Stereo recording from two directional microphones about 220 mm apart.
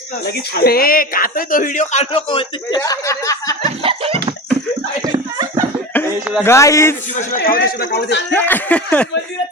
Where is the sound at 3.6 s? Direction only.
25° right (ahead or behind).